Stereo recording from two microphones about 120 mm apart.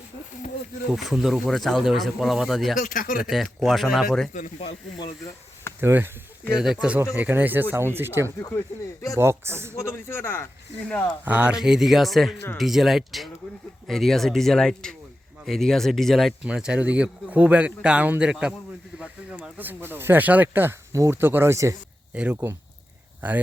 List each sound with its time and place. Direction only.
0.9 s speech: 5° right (ahead or behind)
2.7 s speech: 90° left
3.2 s speech: centre (ahead or behind)
5.8 s speech: 20° right (ahead or behind)
6.6 s speech: 5° right (ahead or behind)
8.4 s speech: 25° left (ahead or behind)
9.1 s speech: 20° right (ahead or behind)
9.7 s speech: 20° left (ahead or behind)
11.3 s speech: 10° right (ahead or behind)
22.1 s speech: 10° right (ahead or behind)